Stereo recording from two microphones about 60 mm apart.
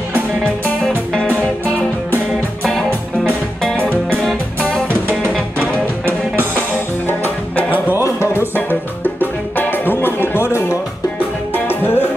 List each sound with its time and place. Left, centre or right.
4.6 s music: centre
7.1 s music: left